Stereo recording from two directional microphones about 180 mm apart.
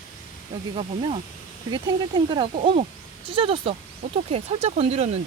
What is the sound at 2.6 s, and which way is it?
Speech, 40° right (ahead or behind).